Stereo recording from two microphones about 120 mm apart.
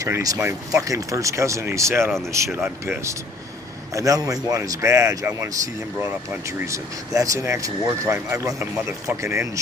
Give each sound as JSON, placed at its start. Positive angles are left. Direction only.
{"t": 0.0, "sound": "speech", "side_deg": -30}
{"t": 6.6, "sound": "speech", "side_deg": -25}